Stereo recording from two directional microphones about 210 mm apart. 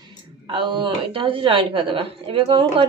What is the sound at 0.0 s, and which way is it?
A woman's voice, 20° right (ahead or behind).